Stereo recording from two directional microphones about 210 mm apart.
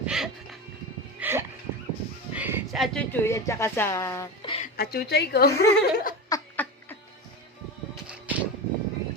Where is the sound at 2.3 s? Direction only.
10° right (ahead or behind); by 4.5 s 15° left (ahead or behind).